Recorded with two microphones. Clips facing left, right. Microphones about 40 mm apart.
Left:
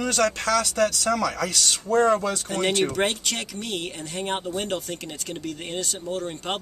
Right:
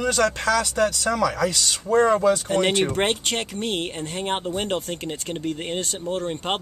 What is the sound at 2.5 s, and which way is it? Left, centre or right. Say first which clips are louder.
Speech: right 3 dB; right.